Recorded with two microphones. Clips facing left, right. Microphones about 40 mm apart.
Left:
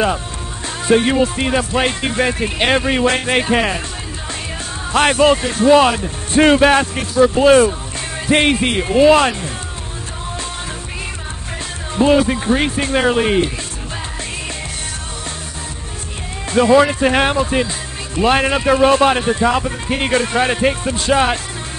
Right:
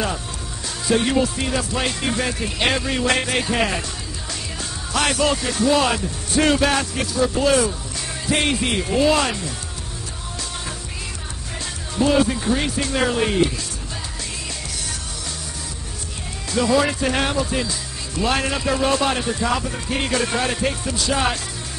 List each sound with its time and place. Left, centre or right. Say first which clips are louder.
0.8 s music: left 6 dB; left
1.2 s a man's voice: left 6 dB; left
4.9 s a man's voice: left 8 dB; left
11.9 s a man's voice: left 5 dB; left
16.5 s a man's voice: left 7 dB; left